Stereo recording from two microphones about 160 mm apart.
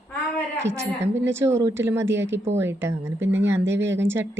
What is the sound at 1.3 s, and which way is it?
Speech, 15° right (ahead or behind).